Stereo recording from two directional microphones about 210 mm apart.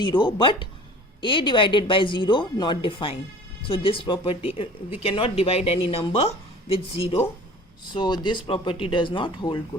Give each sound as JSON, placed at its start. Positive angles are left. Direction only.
{"t": 0.0, "sound": "speech", "side_deg": 20}